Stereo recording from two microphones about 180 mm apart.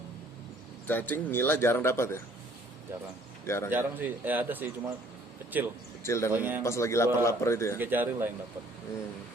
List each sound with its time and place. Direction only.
0.9 s speech: 10° left (ahead or behind)
3.4 s a man's voice: 15° left (ahead or behind)
3.7 s speech: 10° right (ahead or behind)
6.0 s speech: 15° left (ahead or behind)
6.3 s speech: 10° right (ahead or behind)
6.6 s speech: 15° left (ahead or behind)
7.8 s speech: 10° right (ahead or behind)